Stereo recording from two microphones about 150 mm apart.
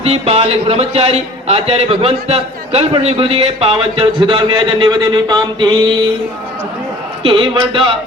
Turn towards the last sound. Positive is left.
turn(degrees=-35)  # may be behind; listen again after turning